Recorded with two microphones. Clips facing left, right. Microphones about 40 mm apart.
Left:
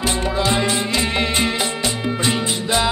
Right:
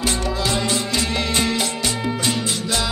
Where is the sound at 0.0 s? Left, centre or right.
Left.